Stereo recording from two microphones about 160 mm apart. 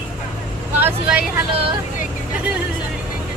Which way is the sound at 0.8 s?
10° right (ahead or behind).